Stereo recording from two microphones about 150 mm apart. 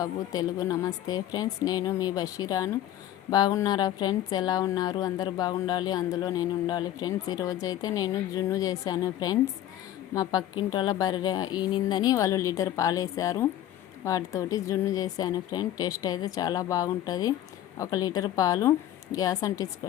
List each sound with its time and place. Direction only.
0.0 s speech: 25° left (ahead or behind)